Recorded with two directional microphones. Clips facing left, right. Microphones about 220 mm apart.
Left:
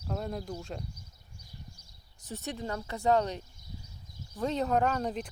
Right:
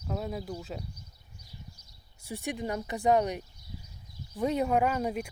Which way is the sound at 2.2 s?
15° right (ahead or behind).